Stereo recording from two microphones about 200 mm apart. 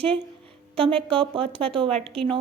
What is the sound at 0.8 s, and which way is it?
Speech, 25° right (ahead or behind).